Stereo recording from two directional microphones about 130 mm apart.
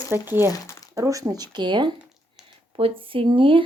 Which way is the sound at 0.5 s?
25° left (ahead or behind).